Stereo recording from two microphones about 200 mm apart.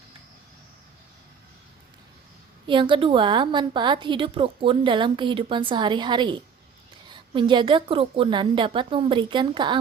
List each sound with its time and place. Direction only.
2.6 s a woman's voice: 25° right (ahead or behind)